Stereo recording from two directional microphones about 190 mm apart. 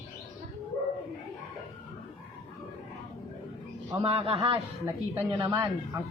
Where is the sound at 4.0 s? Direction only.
30° right (ahead or behind).